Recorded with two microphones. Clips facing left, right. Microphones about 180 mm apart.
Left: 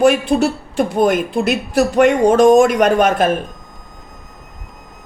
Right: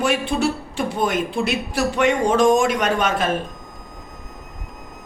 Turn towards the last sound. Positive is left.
turn(degrees=50)  # may be behind; listen again after turning